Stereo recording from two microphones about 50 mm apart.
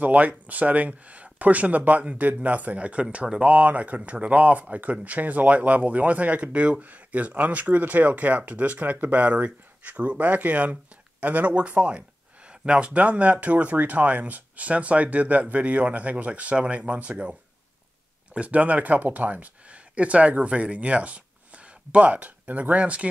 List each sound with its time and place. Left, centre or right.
0.0 s speech: right
18.3 s speech: right